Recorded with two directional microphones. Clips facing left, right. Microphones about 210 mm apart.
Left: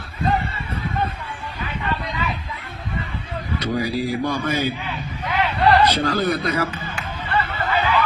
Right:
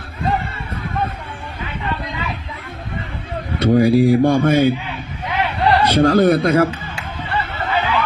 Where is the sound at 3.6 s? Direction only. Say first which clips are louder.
Right 11 dB; 50° right (ahead or behind).